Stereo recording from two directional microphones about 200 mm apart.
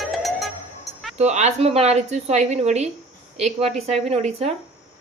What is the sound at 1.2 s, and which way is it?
A woman's voice, 35° right (ahead or behind).